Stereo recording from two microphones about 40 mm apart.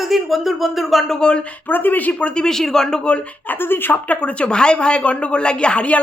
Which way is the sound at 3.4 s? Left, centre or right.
Left.